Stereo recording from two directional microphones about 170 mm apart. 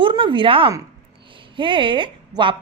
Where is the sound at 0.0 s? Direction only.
30° right (ahead or behind).